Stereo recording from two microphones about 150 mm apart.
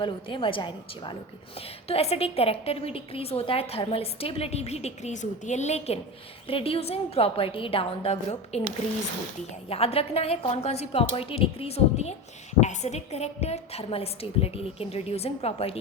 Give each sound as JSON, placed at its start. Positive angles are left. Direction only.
{"t": 0.0, "sound": "a woman's voice", "side_deg": 35}
{"t": 9.6, "sound": "a woman's voice", "side_deg": 40}